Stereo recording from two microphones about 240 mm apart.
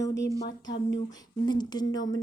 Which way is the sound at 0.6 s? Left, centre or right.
Left.